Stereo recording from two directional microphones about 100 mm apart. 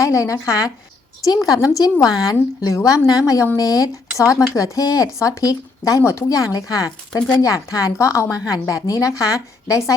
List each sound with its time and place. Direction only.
0.0 s a woman's voice: 30° left (ahead or behind)